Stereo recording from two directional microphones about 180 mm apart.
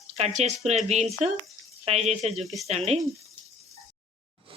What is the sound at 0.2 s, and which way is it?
A woman's voice, 40° right (ahead or behind).